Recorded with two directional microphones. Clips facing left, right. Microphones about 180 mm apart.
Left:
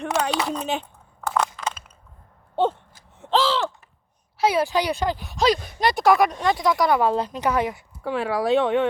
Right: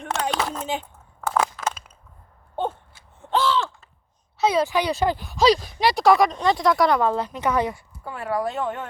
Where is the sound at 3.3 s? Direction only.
90° left.